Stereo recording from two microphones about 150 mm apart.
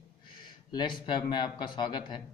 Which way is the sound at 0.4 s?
30° left (ahead or behind).